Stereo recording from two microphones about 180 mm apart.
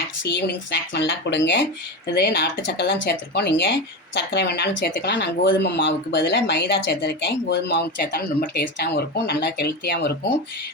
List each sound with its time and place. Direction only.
0.3 s speech: 70° left (ahead or behind)
2.1 s speech: 65° left (ahead or behind)